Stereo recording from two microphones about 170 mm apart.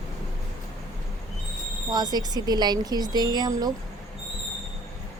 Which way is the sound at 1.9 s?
25° right (ahead or behind).